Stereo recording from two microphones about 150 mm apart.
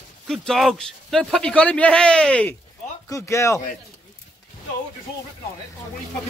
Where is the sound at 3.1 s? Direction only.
20° left (ahead or behind).